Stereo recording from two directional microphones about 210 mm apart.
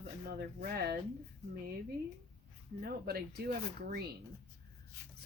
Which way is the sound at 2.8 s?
50° right (ahead or behind).